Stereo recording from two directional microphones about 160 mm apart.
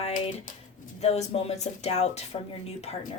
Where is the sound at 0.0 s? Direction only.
55° left (ahead or behind).